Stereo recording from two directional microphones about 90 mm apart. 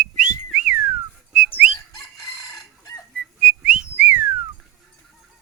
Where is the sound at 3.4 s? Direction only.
15° right (ahead or behind).